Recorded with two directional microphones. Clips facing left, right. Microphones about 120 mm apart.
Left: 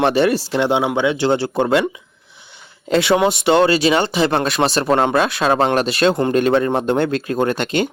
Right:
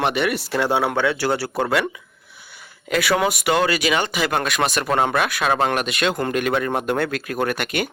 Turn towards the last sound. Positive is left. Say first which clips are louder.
# left 5 dB
turn(degrees=25)  # may be behind; listen again after turning